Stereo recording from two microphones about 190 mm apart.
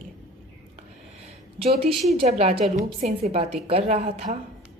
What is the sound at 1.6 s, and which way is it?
A woman's voice, 30° right (ahead or behind).